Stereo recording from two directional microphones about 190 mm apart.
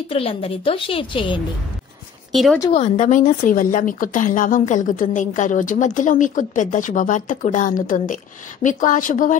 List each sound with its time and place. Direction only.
0.1 s a woman's voice: 30° left (ahead or behind)
2.3 s speech: centre (ahead or behind)
2.7 s a woman's voice: 40° left (ahead or behind)